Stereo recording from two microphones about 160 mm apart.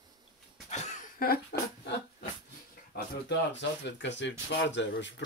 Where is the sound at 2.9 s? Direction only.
80° left.